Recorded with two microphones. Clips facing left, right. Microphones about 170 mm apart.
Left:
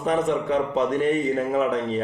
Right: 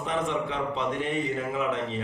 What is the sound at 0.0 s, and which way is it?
A man's voice, 45° left (ahead or behind).